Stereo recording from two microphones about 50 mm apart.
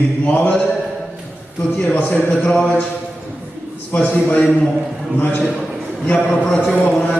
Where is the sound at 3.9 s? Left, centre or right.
Left.